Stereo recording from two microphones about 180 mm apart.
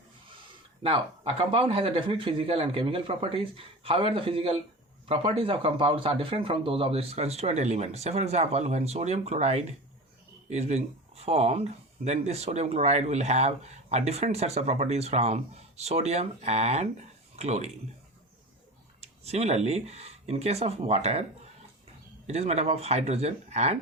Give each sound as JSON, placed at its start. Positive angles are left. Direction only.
{"t": 0.8, "sound": "speech", "side_deg": -30}
{"t": 18.9, "sound": "speech", "side_deg": -35}
{"t": 22.3, "sound": "speech", "side_deg": -35}